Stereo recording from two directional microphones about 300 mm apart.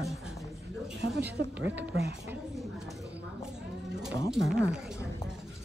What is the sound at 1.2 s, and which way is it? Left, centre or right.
Speech, centre.